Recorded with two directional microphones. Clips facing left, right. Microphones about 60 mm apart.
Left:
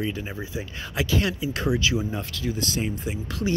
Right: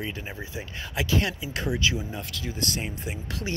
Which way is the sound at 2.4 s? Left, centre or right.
Centre.